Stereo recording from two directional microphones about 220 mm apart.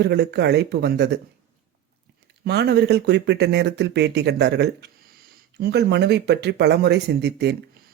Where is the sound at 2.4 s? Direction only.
50° right (ahead or behind).